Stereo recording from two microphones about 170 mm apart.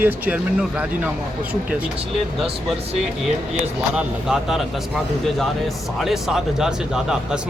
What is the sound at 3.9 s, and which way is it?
Speech, 5° right (ahead or behind).